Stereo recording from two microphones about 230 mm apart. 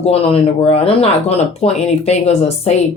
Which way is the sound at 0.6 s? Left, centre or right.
Left.